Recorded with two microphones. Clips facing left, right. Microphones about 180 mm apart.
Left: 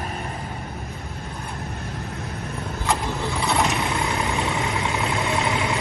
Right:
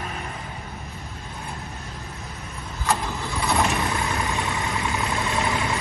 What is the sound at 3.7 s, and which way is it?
Vehicle, 15° left (ahead or behind).